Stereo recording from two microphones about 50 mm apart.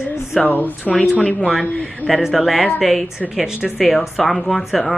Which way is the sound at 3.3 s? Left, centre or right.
Centre.